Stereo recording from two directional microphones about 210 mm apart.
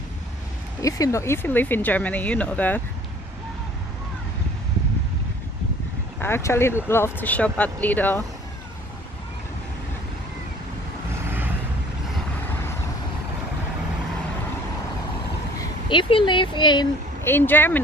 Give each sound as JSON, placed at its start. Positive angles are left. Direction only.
{"t": 0.8, "sound": "speech", "side_deg": 15}
{"t": 6.1, "sound": "speech", "side_deg": 10}
{"t": 11.2, "sound": "vehicle", "side_deg": -10}
{"t": 15.9, "sound": "speech", "side_deg": 25}
{"t": 17.2, "sound": "speech", "side_deg": 10}